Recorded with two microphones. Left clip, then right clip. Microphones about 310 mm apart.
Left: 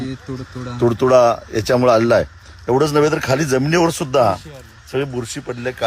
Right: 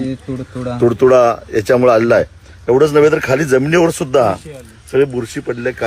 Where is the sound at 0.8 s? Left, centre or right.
Left.